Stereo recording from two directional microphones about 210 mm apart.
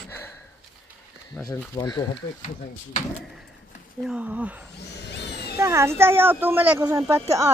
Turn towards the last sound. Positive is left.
turn(degrees=-15)  # may be behind; listen again after turning